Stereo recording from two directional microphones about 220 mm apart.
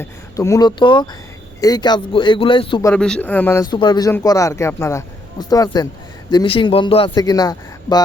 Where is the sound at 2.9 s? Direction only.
5° left (ahead or behind).